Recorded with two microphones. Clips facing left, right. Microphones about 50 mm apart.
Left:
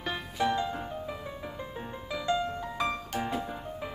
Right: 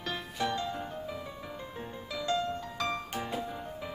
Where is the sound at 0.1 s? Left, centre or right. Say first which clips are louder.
Left 4 dB; centre.